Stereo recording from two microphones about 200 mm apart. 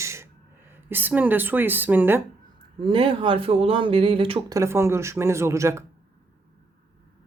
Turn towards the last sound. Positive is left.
turn(degrees=-15)  # may be behind; listen again after turning